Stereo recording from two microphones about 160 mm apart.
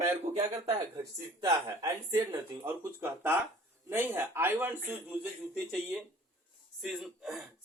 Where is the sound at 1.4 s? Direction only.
20° right (ahead or behind).